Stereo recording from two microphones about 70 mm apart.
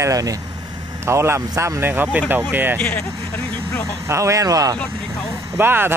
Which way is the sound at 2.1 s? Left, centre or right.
Right.